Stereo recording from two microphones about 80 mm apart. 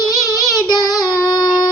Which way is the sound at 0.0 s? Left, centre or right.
Left.